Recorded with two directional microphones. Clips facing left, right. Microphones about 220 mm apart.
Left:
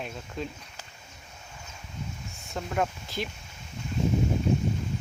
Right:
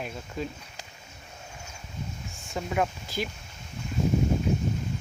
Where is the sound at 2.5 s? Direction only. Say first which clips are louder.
Right 1 dB; 5° right (ahead or behind).